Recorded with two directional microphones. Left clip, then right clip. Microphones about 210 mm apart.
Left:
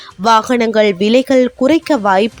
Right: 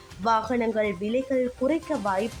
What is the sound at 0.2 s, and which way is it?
Speech, 40° left (ahead or behind).